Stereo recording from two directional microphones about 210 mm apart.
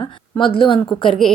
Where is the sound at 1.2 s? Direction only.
Centre (ahead or behind).